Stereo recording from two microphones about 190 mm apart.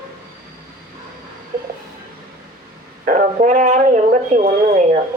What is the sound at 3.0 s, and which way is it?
Speech, 40° right (ahead or behind).